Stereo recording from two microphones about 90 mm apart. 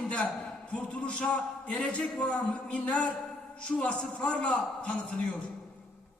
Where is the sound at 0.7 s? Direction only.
15° left (ahead or behind).